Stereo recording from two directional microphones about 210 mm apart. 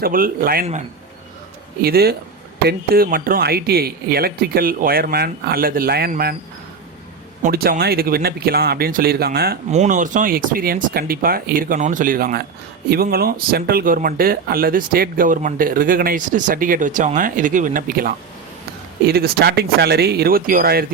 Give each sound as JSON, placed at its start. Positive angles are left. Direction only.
{"t": 0.0, "sound": "speech", "side_deg": -45}
{"t": 1.8, "sound": "speech", "side_deg": -45}
{"t": 7.4, "sound": "speech", "side_deg": -45}
{"t": 9.7, "sound": "speech", "side_deg": -35}